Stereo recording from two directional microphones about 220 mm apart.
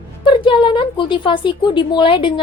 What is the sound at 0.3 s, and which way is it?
A woman's voice, 25° left (ahead or behind).